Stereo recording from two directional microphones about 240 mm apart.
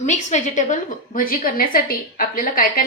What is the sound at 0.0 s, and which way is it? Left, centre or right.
A woman's voice, left.